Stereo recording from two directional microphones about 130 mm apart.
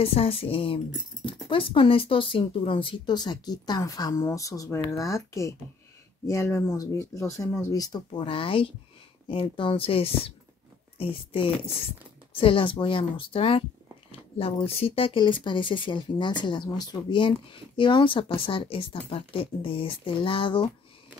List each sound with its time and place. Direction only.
0.0 s speech: 50° left (ahead or behind)